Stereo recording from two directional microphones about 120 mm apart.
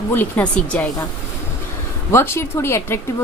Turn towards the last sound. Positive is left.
turn(degrees=20)  # may be behind; listen again after turning